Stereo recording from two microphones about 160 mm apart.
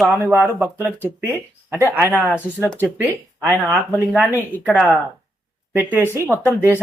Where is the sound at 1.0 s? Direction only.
15° right (ahead or behind).